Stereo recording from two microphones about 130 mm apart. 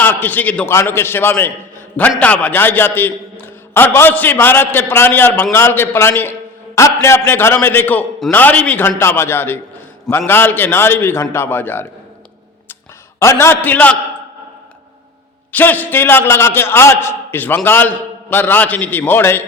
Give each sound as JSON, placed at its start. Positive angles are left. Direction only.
{"t": 0.0, "sound": "a man's voice", "side_deg": 15}
{"t": 13.1, "sound": "a man's voice", "side_deg": 20}
{"t": 15.5, "sound": "a man's voice", "side_deg": 15}